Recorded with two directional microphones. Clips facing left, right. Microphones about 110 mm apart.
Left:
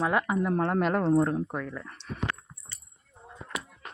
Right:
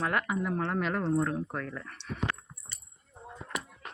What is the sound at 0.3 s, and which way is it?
Speech, 45° left (ahead or behind).